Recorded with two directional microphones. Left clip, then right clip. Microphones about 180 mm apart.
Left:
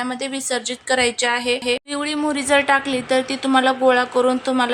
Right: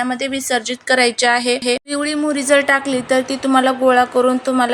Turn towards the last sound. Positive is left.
turn(degrees=-5)  # may be behind; listen again after turning